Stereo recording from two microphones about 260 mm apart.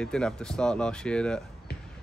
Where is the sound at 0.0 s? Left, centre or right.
Centre.